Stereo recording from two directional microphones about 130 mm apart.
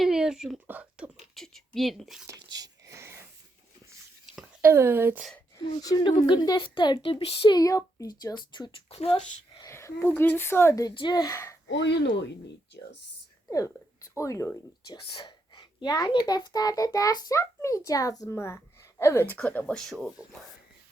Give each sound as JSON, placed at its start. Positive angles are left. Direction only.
{"t": 0.0, "sound": "a sound", "side_deg": -5}
{"t": 0.7, "sound": "speech", "side_deg": -10}
{"t": 1.4, "sound": "a woman's voice", "side_deg": 0}
{"t": 2.2, "sound": "a sound", "side_deg": -25}
{"t": 4.6, "sound": "a woman's voice", "side_deg": -20}
{"t": 5.5, "sound": "speech", "side_deg": 30}
{"t": 7.5, "sound": "speech", "side_deg": 25}
{"t": 8.9, "sound": "speech", "side_deg": 50}
{"t": 9.6, "sound": "a sound", "side_deg": 20}
{"t": 10.2, "sound": "speech", "side_deg": 15}
{"t": 10.9, "sound": "speech", "side_deg": 35}
{"t": 13.5, "sound": "whispering", "side_deg": 25}
{"t": 14.2, "sound": "a child's voice", "side_deg": 20}
{"t": 14.8, "sound": "a child's voice", "side_deg": 35}